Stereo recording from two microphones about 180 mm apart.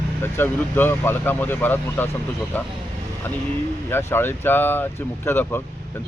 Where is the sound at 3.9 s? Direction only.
10° left (ahead or behind).